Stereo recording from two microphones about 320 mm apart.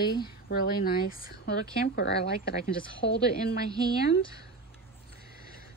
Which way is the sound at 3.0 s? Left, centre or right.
Left.